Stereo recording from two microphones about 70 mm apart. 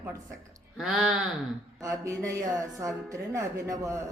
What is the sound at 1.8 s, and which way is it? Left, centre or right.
Speech, right.